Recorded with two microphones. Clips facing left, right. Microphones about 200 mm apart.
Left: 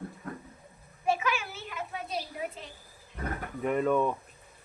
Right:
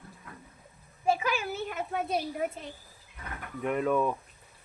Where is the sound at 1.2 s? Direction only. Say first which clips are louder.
Right 2 dB; 40° right (ahead or behind).